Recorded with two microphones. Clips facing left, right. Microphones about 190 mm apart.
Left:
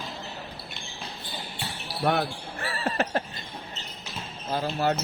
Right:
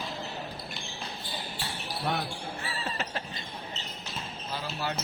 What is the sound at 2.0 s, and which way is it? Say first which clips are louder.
Basketball bounce: left 7 dB; 65° left (ahead or behind).